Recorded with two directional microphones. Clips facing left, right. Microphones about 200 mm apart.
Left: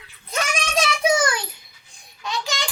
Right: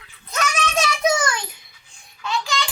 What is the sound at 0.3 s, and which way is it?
Child singing, 10° left (ahead or behind).